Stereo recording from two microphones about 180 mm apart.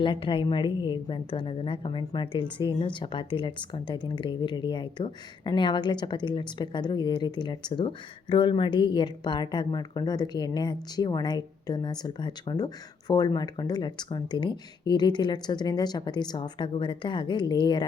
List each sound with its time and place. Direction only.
0.0 s a woman's voice: 30° left (ahead or behind)